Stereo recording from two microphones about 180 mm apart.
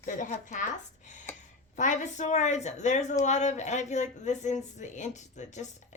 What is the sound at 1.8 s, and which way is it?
Speech, 45° left (ahead or behind).